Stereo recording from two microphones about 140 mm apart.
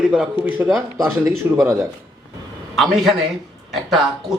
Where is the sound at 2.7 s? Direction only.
Centre (ahead or behind).